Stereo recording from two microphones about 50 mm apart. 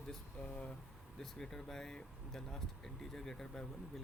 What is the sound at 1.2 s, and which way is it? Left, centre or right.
Speech, centre.